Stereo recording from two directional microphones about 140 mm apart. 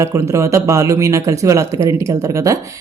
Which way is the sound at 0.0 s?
20° right (ahead or behind).